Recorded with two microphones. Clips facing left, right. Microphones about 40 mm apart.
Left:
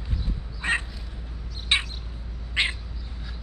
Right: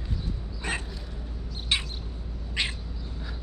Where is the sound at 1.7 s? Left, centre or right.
Left.